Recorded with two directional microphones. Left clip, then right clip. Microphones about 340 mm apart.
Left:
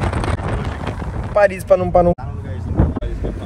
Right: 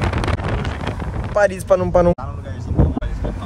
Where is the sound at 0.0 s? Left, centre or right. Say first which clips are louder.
Even; centre.